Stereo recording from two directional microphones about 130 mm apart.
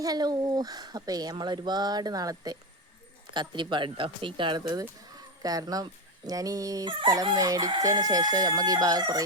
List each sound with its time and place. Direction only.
0.0 s speech: 30° right (ahead or behind)